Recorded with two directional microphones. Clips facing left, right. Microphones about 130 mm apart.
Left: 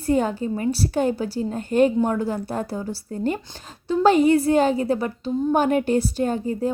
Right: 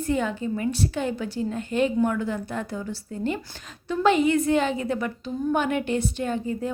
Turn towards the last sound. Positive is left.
turn(degrees=35)  # may be behind; listen again after turning